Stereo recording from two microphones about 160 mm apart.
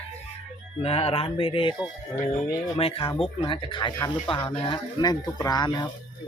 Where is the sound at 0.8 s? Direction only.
40° left (ahead or behind).